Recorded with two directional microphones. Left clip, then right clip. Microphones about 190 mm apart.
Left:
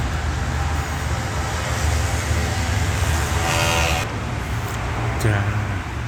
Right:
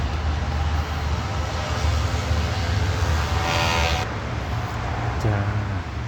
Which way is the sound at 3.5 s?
60° left (ahead or behind).